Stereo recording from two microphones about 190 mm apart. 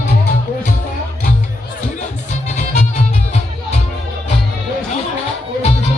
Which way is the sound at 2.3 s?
40° left (ahead or behind).